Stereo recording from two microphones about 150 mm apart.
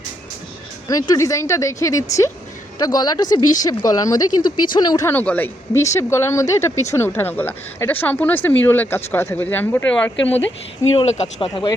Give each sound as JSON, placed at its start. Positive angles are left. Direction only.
{"t": 0.9, "sound": "speech", "side_deg": 25}
{"t": 10.9, "sound": "speech", "side_deg": 45}